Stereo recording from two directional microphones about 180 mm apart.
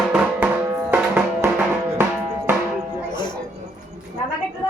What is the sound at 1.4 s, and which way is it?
Music, 15° right (ahead or behind).